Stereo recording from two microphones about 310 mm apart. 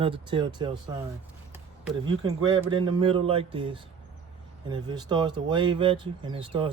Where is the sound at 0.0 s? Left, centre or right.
Centre.